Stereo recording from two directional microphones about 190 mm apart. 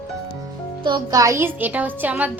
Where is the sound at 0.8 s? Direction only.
20° right (ahead or behind).